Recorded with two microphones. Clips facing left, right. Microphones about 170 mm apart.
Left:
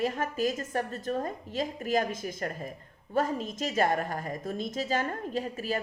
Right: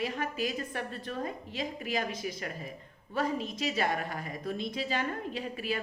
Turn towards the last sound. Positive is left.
turn(degrees=45)  # may be behind; listen again after turning